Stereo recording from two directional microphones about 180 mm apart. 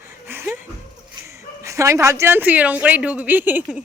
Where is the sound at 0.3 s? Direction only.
10° right (ahead or behind).